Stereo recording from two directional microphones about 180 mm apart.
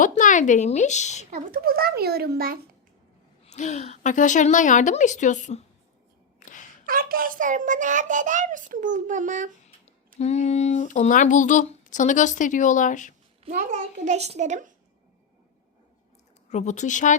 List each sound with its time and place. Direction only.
0.0 s speech: 45° left (ahead or behind)
1.3 s speech: 55° right (ahead or behind)
3.4 s speech: 40° left (ahead or behind)
6.4 s a sound: 45° left (ahead or behind)
6.8 s a child's voice: 50° right (ahead or behind)
10.2 s speech: 35° left (ahead or behind)
13.4 s a child's voice: 40° right (ahead or behind)
16.5 s speech: 40° left (ahead or behind)